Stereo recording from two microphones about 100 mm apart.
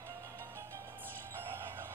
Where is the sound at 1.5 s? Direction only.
25° right (ahead or behind).